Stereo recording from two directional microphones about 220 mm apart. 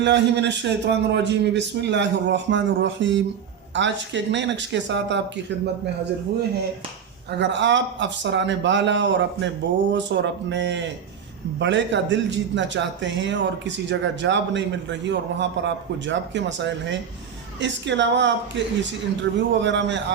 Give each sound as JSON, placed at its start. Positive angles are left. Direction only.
{"t": 0.0, "sound": "a man's voice", "side_deg": -55}
{"t": 7.3, "sound": "a man's voice", "side_deg": -55}